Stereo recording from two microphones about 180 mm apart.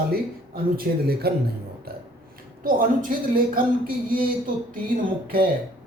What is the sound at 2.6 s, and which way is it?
A woman's voice, 50° right (ahead or behind).